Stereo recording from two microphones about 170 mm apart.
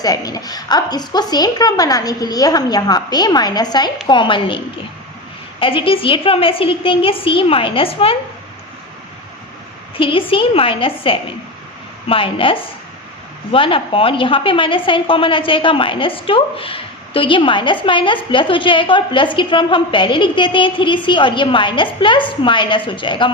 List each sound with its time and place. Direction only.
0.0 s a woman's voice: 20° left (ahead or behind)
10.0 s a woman's voice: 30° left (ahead or behind)